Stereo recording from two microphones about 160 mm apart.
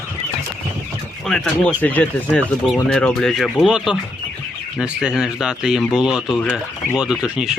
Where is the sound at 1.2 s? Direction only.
5° left (ahead or behind).